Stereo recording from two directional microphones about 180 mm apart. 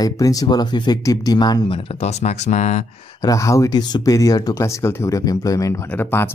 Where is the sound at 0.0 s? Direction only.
20° left (ahead or behind).